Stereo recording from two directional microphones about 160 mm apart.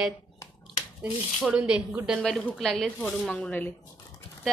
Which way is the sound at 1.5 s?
5° right (ahead or behind).